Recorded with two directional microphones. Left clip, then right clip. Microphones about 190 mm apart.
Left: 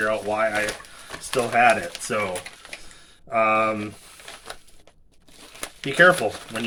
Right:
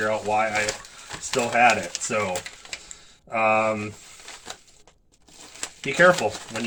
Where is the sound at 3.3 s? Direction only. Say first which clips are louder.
Left 1 dB; 25° left (ahead or behind).